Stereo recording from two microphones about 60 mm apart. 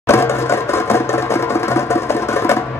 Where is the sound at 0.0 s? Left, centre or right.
Left.